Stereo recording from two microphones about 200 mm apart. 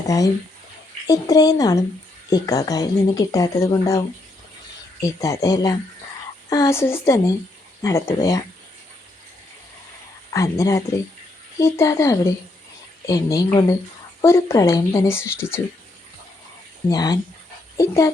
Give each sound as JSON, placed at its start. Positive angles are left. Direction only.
{"t": 1.0, "sound": "speech", "side_deg": 20}
{"t": 10.3, "sound": "speech", "side_deg": 15}
{"t": 16.9, "sound": "speech", "side_deg": 20}